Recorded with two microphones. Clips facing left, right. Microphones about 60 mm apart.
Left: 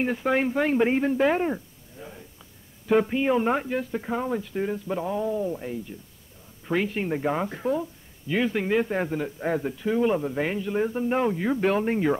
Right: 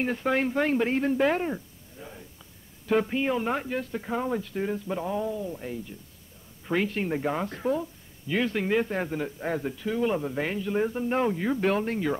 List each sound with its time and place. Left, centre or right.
0.0 s a woman's voice: centre
5.3 s speech: centre
5.6 s speech: centre
11.8 s speech: centre